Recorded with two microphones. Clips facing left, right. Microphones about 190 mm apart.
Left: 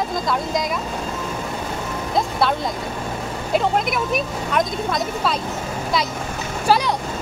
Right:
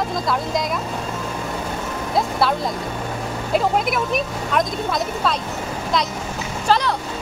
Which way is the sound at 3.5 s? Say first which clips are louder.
Even; centre (ahead or behind).